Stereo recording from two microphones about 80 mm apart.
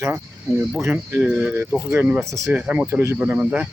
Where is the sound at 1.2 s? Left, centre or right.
Centre.